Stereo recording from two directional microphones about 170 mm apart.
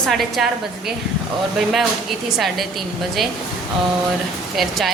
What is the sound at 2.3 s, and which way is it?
Speech, centre (ahead or behind).